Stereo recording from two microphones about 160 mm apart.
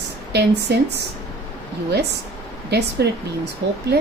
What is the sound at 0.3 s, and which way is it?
Speech, 90° right.